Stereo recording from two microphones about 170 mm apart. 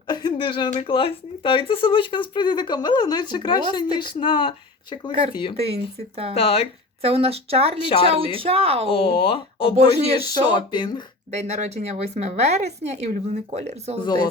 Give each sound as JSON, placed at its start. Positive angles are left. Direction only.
{"t": 0.1, "sound": "a sound", "side_deg": 25}
{"t": 0.7, "sound": "speech", "side_deg": 30}
{"t": 5.5, "sound": "speech", "side_deg": -35}
{"t": 6.3, "sound": "speech", "side_deg": 35}
{"t": 7.0, "sound": "speech", "side_deg": -35}
{"t": 7.8, "sound": "speech", "side_deg": 30}
{"t": 8.1, "sound": "speech", "side_deg": -35}
{"t": 8.9, "sound": "speech", "side_deg": 30}
{"t": 11.3, "sound": "speech", "side_deg": -40}
{"t": 14.0, "sound": "speech", "side_deg": 25}